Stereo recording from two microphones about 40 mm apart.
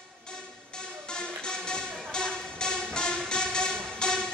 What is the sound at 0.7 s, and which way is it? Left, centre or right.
Music, left.